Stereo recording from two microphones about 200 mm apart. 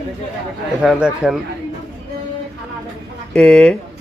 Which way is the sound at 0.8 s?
5° right (ahead or behind).